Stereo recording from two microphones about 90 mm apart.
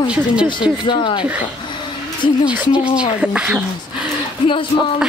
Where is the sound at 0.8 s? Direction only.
60° left (ahead or behind).